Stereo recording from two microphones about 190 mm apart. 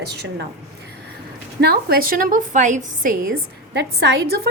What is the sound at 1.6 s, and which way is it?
A woman's voice, 55° right (ahead or behind).